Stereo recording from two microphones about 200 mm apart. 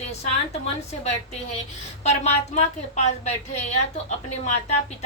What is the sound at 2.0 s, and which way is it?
A woman's voice, 35° left (ahead or behind).